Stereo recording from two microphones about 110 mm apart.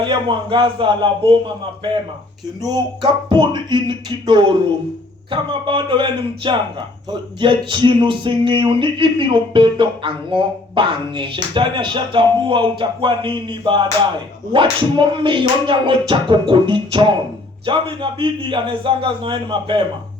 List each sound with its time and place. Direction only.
0.0 s speech: 45° right (ahead or behind)
2.6 s speech: 35° right (ahead or behind)